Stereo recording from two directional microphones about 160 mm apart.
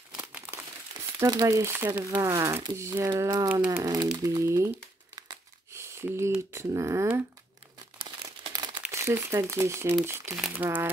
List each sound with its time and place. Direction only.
0.1 s crumpling: 10° right (ahead or behind)
1.2 s speech: 25° right (ahead or behind)
4.2 s crumpling: 20° right (ahead or behind)
6.5 s speech: 20° right (ahead or behind)
8.8 s speech: 15° right (ahead or behind)